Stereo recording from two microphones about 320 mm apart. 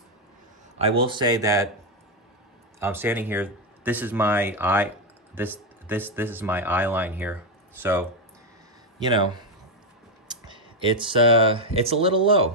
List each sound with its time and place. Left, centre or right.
0.7 s speech: centre
2.8 s speech: centre